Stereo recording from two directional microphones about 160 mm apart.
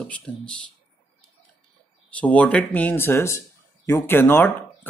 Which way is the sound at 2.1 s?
10° left (ahead or behind).